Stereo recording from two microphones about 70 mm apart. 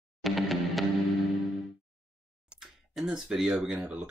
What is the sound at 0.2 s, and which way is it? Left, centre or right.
Music, centre.